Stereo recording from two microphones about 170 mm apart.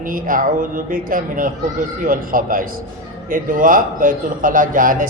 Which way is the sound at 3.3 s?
50° right (ahead or behind).